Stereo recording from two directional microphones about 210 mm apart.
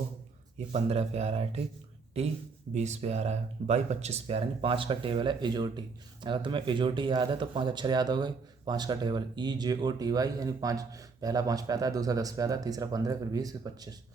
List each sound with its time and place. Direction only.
0.7 s speech: 30° right (ahead or behind)